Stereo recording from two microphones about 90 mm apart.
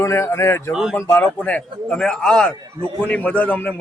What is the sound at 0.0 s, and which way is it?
Speech, 30° left (ahead or behind).